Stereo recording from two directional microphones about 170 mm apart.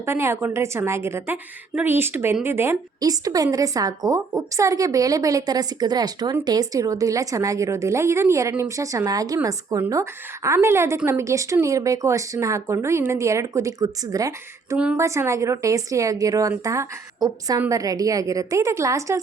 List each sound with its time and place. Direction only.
0.0 s a woman's voice: 15° right (ahead or behind)